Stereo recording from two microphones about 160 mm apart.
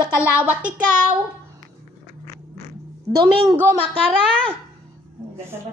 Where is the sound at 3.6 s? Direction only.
10° right (ahead or behind).